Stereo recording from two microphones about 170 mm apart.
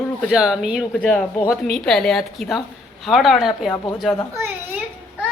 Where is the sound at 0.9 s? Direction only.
5° left (ahead or behind).